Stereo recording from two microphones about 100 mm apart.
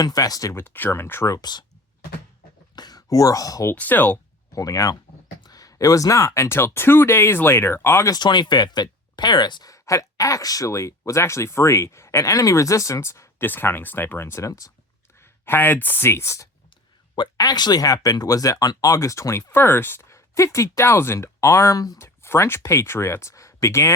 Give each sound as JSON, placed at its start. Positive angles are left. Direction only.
{"t": 0.0, "sound": "speech", "side_deg": 40}
{"t": 0.5, "sound": "speech", "side_deg": 20}
{"t": 1.4, "sound": "speech", "side_deg": 45}
{"t": 2.7, "sound": "a sound", "side_deg": 40}
{"t": 3.7, "sound": "speech", "side_deg": 20}
{"t": 4.5, "sound": "speech", "side_deg": 35}
{"t": 8.1, "sound": "speech", "side_deg": 45}
{"t": 9.7, "sound": "speech", "side_deg": 35}
{"t": 17.2, "sound": "speech", "side_deg": 40}